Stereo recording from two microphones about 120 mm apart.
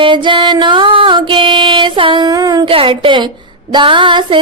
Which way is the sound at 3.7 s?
40° right (ahead or behind).